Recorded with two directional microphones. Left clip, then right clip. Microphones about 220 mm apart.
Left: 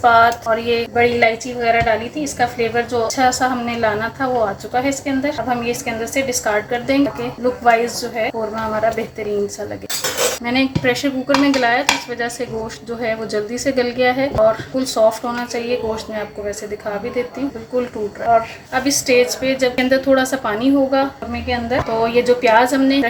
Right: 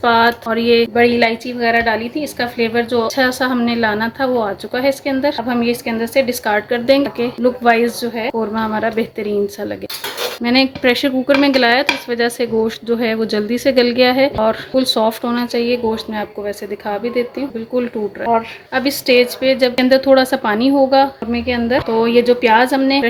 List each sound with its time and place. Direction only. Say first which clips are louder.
0.0 s a woman's voice: left 1 dB; 45° right (ahead or behind)
10.4 s dishes: right 8 dB; 40° right (ahead or behind)
18.3 s dishes: left 2 dB; 40° right (ahead or behind)